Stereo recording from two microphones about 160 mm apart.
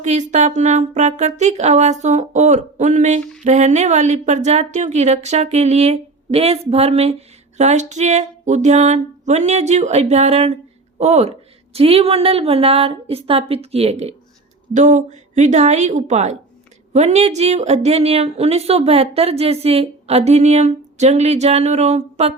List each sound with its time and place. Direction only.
0.0 s a woman's voice: 50° right (ahead or behind)